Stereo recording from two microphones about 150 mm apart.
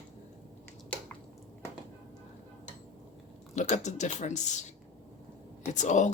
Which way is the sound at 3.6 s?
50° left (ahead or behind).